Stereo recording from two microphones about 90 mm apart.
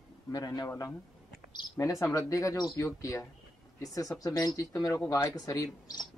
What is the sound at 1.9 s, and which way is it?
Speech, 35° left (ahead or behind).